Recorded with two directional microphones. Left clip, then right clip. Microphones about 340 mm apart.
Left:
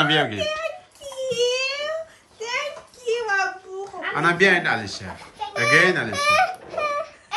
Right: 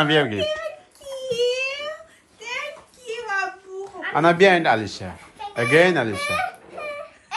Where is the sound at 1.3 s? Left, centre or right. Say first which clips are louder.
Even; centre.